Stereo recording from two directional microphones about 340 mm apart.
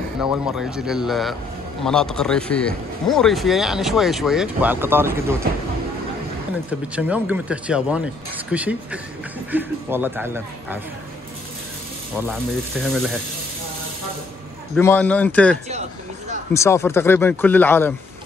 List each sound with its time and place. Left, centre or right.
0.2 s a man's voice: centre
7.0 s a man's voice: centre
12.2 s a man's voice: centre
14.8 s a man's voice: centre
16.5 s speech: centre